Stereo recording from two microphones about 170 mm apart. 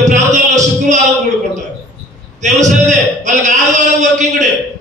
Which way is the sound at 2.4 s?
45° right (ahead or behind).